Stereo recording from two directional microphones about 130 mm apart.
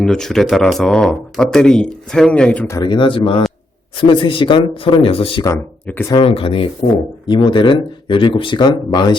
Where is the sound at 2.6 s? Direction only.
30° left (ahead or behind).